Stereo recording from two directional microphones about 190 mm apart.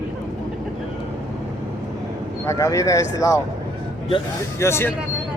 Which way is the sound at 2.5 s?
15° left (ahead or behind).